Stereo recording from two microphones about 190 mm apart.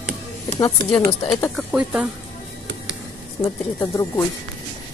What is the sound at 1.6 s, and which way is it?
Speech, 5° right (ahead or behind).